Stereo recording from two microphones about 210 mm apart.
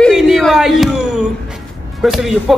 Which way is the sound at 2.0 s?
Centre (ahead or behind).